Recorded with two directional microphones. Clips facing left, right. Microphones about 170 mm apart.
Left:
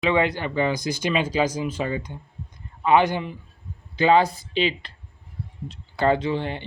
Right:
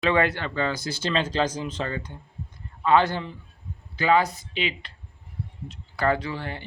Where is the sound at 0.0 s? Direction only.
15° left (ahead or behind).